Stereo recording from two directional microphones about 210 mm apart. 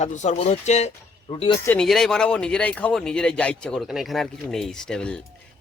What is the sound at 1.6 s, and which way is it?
Speech, 5° left (ahead or behind).